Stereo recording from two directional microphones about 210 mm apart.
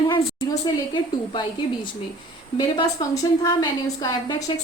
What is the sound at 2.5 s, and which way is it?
A woman's voice, 20° left (ahead or behind).